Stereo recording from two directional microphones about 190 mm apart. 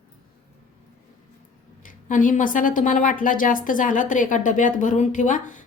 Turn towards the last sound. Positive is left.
turn(degrees=40)  # may be behind; listen again after turning